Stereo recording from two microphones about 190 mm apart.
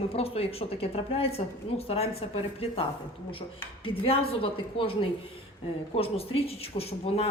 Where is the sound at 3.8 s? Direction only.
30° left (ahead or behind).